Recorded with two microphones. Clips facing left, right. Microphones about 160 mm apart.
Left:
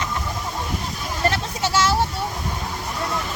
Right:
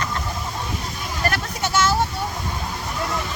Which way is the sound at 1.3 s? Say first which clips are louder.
Left 1 dB; 30° left (ahead or behind).